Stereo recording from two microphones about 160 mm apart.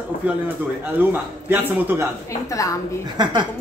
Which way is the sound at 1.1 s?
10° right (ahead or behind).